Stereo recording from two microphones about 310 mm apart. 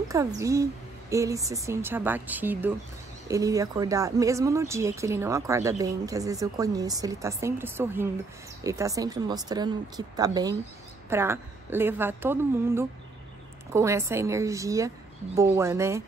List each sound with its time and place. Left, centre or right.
0.1 s speech: centre